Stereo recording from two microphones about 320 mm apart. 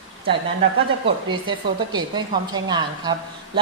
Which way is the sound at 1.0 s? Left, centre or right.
Centre.